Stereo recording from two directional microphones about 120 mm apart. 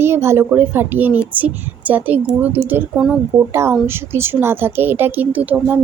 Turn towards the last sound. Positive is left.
turn(degrees=-15)  # may be behind; listen again after turning